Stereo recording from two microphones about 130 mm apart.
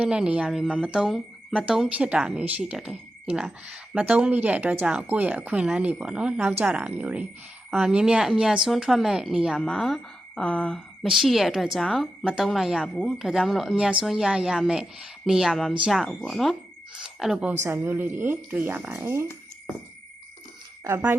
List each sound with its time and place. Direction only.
0.0 s speech: 10° right (ahead or behind)
17.6 s speech: 20° right (ahead or behind)
20.8 s speech: 20° right (ahead or behind)